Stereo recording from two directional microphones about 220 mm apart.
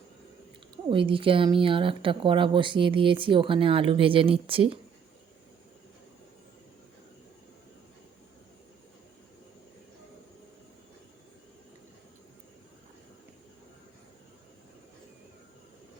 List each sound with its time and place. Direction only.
0.9 s speech: 25° right (ahead or behind)